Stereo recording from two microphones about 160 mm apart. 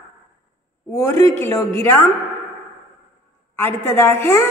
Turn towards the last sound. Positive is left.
turn(degrees=15)  # may be behind; listen again after turning